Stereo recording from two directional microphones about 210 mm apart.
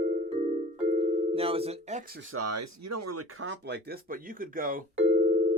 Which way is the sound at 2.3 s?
90° right.